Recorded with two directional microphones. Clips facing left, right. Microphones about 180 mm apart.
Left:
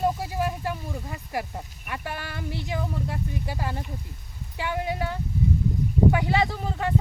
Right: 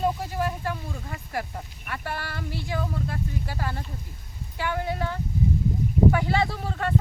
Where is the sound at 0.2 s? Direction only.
15° left (ahead or behind).